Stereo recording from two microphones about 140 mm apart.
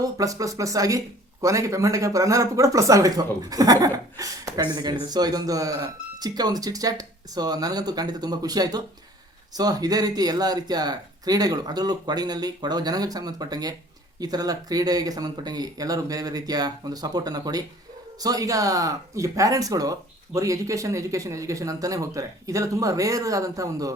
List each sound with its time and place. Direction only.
0.0 s speech: 25° right (ahead or behind)